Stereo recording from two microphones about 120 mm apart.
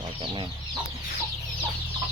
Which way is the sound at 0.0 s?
40° right (ahead or behind).